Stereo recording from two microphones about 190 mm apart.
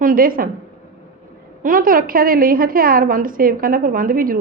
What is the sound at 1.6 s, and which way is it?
A woman's voice, 45° right (ahead or behind).